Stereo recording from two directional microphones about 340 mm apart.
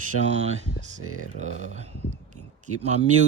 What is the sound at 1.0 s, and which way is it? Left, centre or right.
Speech, right.